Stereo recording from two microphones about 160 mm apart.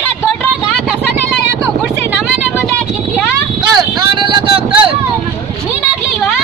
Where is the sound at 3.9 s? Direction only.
30° right (ahead or behind).